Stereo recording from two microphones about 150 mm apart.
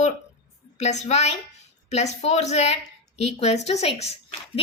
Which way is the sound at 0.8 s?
50° left (ahead or behind).